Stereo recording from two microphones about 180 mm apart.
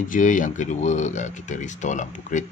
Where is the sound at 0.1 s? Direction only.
45° left (ahead or behind).